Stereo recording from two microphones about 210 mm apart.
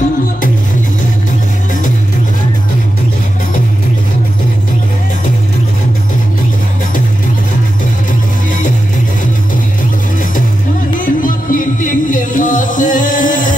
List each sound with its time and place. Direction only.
8.1 s music: 40° left (ahead or behind)
11.0 s music: 40° left (ahead or behind)